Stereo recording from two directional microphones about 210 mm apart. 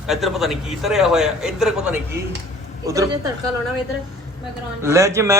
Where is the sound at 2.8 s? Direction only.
15° right (ahead or behind).